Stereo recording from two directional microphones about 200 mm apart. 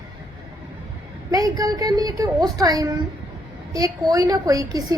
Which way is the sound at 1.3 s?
20° right (ahead or behind).